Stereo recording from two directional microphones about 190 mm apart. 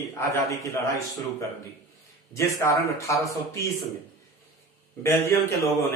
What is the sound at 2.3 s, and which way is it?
Speech, 15° left (ahead or behind).